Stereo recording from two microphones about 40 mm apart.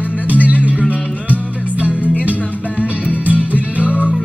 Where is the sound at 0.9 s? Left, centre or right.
Left.